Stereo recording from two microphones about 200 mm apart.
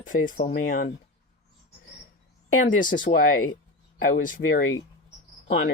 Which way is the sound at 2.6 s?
40° left (ahead or behind).